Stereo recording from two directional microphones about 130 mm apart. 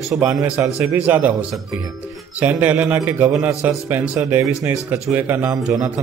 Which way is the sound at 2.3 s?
15° right (ahead or behind).